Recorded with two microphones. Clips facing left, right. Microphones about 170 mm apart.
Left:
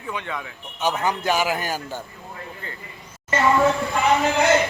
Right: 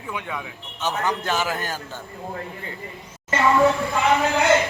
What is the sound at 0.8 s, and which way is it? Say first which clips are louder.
Speech: left 2 dB; 10° left (ahead or behind).